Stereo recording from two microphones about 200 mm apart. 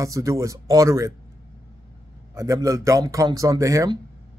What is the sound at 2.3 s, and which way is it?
Speech, 15° right (ahead or behind).